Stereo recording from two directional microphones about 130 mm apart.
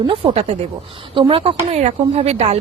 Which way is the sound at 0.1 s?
50° right (ahead or behind).